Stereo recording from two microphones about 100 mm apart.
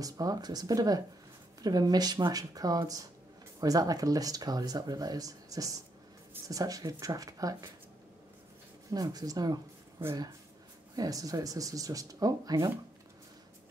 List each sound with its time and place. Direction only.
0.0 s speech: 35° right (ahead or behind)
8.9 s speech: 40° right (ahead or behind)
11.0 s speech: 35° right (ahead or behind)